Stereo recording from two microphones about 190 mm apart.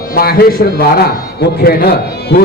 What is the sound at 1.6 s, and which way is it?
Speech, 55° left (ahead or behind).